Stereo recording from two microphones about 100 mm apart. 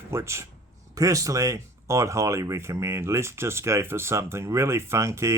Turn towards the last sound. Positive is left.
turn(degrees=-30)  # may be behind; listen again after turning